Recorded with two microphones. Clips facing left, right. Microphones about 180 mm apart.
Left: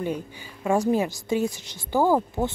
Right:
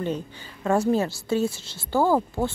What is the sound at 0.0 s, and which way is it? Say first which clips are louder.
Speech: even; 10° left (ahead or behind).